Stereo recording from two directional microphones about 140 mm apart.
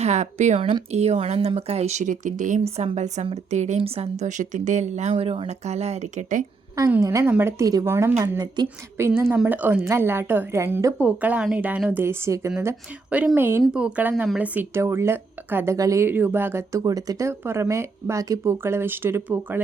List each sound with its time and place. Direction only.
0.0 s speech: 55° right (ahead or behind)
0.6 s a woman's voice: 45° right (ahead or behind); by 2.6 s 65° right (ahead or behind)
2.7 s a woman's voice: 50° right (ahead or behind)
6.7 s speech: 20° right (ahead or behind)
9.3 s a woman's voice: 10° right (ahead or behind)
10.9 s a woman's voice: 10° right (ahead or behind)